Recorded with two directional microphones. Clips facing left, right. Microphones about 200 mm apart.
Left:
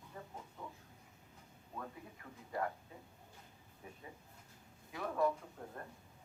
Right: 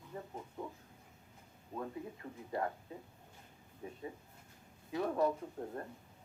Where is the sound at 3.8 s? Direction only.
25° right (ahead or behind).